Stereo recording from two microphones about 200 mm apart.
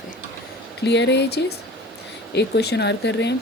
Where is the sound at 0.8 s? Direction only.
60° left (ahead or behind).